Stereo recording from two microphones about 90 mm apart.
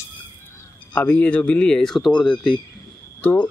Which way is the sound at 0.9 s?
15° left (ahead or behind).